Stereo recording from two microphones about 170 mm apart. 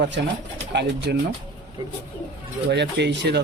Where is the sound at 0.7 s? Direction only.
90° right.